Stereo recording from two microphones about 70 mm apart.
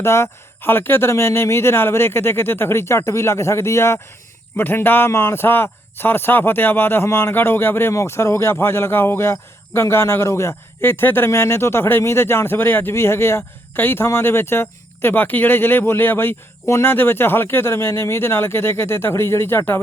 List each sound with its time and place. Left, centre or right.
0.0 s a man's voice: left
16.6 s speech: left
16.9 s a man's voice: left